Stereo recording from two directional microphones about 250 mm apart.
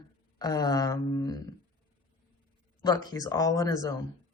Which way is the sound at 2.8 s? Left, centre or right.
Centre.